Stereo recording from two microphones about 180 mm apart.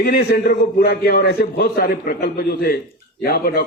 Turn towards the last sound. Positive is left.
turn(degrees=60)  # may be behind; listen again after turning